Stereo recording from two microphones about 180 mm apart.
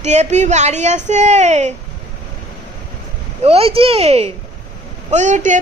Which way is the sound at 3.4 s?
35° right (ahead or behind).